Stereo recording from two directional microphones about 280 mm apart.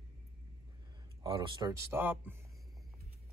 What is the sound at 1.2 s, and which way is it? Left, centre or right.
Speech, centre.